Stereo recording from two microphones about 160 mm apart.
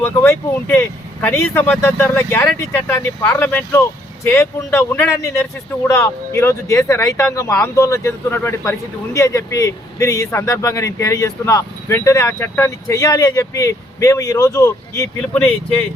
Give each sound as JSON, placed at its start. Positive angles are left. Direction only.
{"t": 0.0, "sound": "a man's voice", "side_deg": 10}
{"t": 15.2, "sound": "speech", "side_deg": 10}